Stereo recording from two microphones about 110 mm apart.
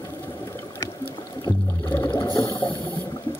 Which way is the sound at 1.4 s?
25° left (ahead or behind).